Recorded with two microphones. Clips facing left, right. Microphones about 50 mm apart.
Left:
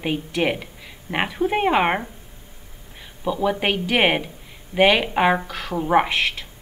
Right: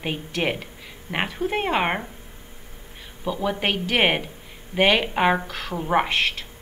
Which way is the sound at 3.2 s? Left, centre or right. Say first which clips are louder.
Left 3 dB; centre.